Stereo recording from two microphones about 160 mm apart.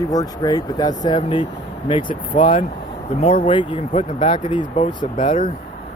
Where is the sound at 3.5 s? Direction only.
30° left (ahead or behind).